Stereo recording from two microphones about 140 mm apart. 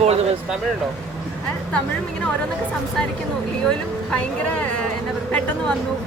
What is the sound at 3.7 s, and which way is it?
Speech, 10° left (ahead or behind).